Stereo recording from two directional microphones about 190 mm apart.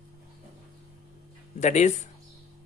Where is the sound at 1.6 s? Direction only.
40° left (ahead or behind).